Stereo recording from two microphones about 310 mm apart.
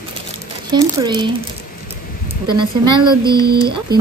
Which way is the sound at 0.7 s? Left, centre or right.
Centre.